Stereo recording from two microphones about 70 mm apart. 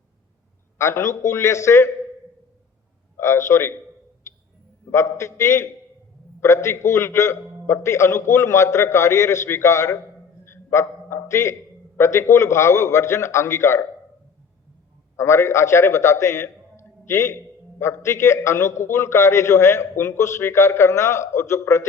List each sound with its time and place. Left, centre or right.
0.8 s a man's voice: left
3.2 s a man's voice: left
4.3 s owl: left
4.9 s a man's voice: left
10.4 s a sound: left
11.9 s a man's voice: left
15.1 s a man's voice: left